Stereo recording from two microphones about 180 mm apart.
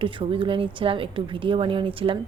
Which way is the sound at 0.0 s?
30° right (ahead or behind).